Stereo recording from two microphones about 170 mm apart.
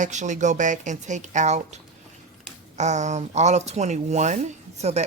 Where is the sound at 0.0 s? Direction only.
45° right (ahead or behind).